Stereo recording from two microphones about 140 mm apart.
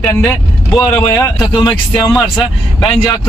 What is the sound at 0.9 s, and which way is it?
Speech, 20° left (ahead or behind).